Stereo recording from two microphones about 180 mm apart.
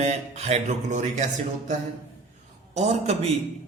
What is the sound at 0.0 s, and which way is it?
A man's voice, 35° right (ahead or behind).